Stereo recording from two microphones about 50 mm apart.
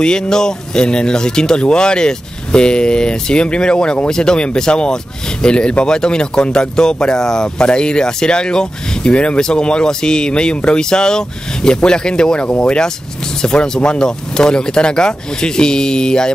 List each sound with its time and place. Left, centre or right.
0.0 s speech: centre